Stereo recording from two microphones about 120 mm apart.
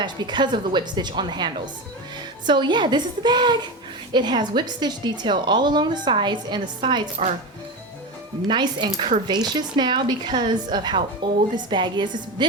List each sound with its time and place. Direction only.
0.0 s a woman's voice: 40° right (ahead or behind)
8.4 s a woman's voice: 40° right (ahead or behind)